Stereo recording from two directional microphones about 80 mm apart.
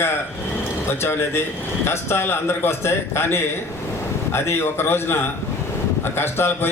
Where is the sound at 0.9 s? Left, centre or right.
Left.